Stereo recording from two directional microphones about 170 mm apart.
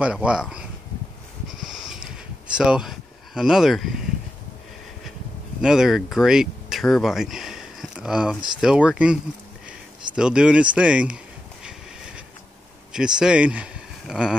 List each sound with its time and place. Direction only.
0.0 s speech: 5° right (ahead or behind)
1.7 s a sound: 5° right (ahead or behind)
2.5 s speech: 5° right (ahead or behind)
5.6 s speech: 5° right (ahead or behind)
12.9 s speech: 5° right (ahead or behind)